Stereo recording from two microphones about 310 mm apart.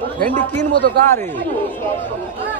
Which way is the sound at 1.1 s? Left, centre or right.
Centre.